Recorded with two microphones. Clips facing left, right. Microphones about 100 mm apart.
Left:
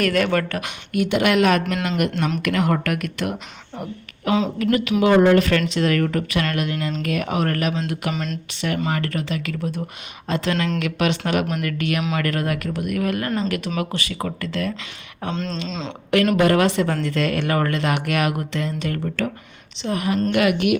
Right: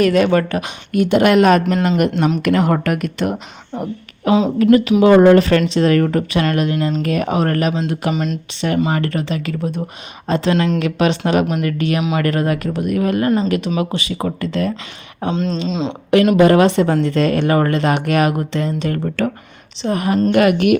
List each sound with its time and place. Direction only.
0.0 s speech: 20° right (ahead or behind)
0.9 s speech: 35° right (ahead or behind)
8.1 s speech: 10° right (ahead or behind)
8.9 s speech: 25° right (ahead or behind)
15.6 s speech: 10° right (ahead or behind)
16.4 s a woman's voice: 25° right (ahead or behind); by 20.7 s 45° right (ahead or behind)